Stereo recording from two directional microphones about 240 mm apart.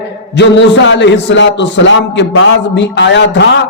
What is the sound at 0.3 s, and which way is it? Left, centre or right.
A man's voice, left.